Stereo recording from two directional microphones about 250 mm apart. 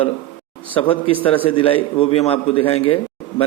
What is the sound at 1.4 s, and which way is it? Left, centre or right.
A man's voice, left.